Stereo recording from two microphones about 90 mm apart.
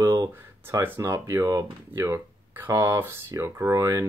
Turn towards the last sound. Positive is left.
turn(degrees=-35)  # may be behind; listen again after turning